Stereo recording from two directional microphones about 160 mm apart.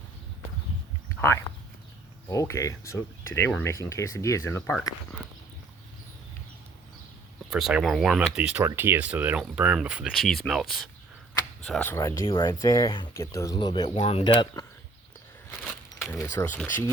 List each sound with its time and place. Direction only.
1.2 s speech: 15° left (ahead or behind)
7.5 s speech: 5° right (ahead or behind); by 12.3 s 20° left (ahead or behind)
12.3 s speech: 30° left (ahead or behind)
13.9 s speech: 40° left (ahead or behind)
16.0 s speech: 20° left (ahead or behind)